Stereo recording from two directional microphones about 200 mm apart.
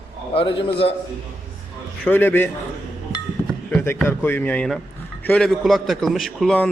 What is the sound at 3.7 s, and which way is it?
A man's voice, 10° left (ahead or behind).